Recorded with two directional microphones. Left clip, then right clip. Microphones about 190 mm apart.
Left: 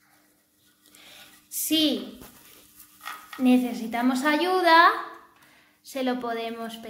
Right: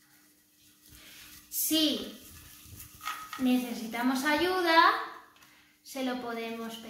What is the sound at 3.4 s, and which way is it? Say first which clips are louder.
A woman's voice: left 8 dB; 45° left (ahead or behind).